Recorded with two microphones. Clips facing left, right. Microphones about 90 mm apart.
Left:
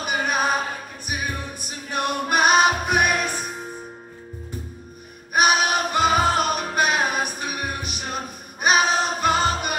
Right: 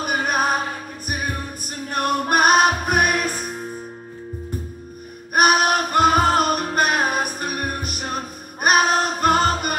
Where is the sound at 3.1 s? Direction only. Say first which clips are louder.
Right 2 dB; 5° right (ahead or behind).